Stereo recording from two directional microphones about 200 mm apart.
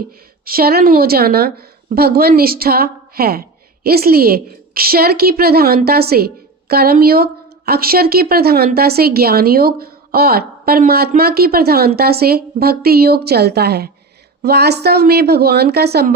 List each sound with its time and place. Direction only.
0.4 s a woman's voice: 50° right (ahead or behind)